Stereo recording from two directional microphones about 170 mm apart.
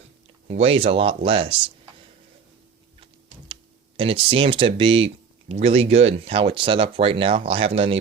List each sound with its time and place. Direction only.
0.4 s speech: 35° right (ahead or behind)
3.5 s speech: 30° right (ahead or behind)